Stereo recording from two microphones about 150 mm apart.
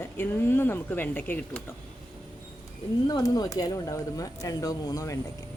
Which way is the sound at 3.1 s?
25° left (ahead or behind).